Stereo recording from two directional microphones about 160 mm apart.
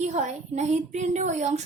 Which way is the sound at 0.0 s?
50° right (ahead or behind).